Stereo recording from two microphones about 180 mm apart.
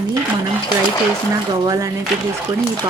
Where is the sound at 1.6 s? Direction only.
20° right (ahead or behind).